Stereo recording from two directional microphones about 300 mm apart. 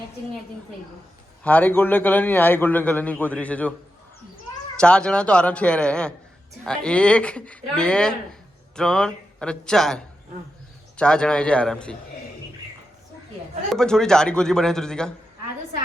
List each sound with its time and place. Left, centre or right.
1.5 s speech: centre
4.8 s speech: centre
13.7 s speech: centre